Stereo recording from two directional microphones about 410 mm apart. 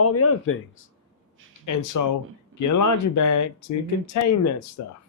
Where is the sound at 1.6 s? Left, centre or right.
Left.